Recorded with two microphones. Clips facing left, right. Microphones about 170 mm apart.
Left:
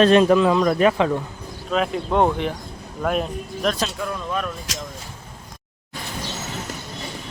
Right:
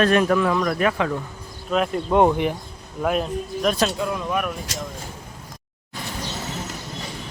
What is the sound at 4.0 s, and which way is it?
Speech, 15° right (ahead or behind).